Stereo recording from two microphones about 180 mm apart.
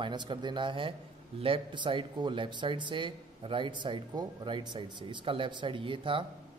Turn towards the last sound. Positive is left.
turn(degrees=-30)  # may be behind; listen again after turning